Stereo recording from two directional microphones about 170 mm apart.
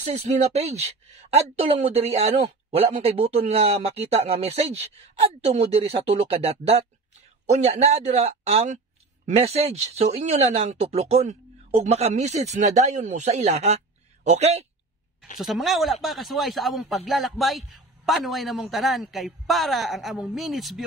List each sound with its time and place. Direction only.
0.0 s speech: 45° right (ahead or behind)
15.3 s speech: centre (ahead or behind)